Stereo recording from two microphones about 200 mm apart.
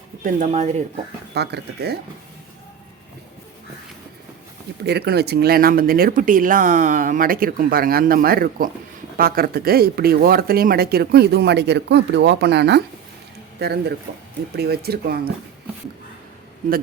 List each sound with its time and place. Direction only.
0.2 s speech: 40° right (ahead or behind)
1.3 s speech: 55° right (ahead or behind)
4.8 s speech: 55° right (ahead or behind)